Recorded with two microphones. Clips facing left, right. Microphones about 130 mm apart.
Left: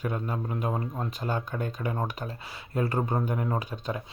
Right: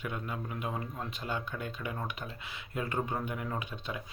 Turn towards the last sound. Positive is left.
turn(degrees=40)  # may be behind; listen again after turning